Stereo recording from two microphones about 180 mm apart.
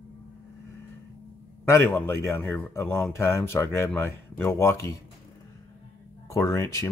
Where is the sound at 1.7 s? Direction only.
10° left (ahead or behind).